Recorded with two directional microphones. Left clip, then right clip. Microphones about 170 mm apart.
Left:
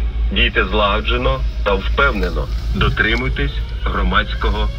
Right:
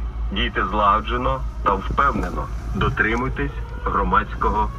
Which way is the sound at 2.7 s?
70° left (ahead or behind).